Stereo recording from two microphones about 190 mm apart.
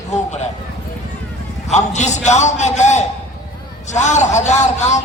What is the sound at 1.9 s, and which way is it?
A man's voice, 40° left (ahead or behind).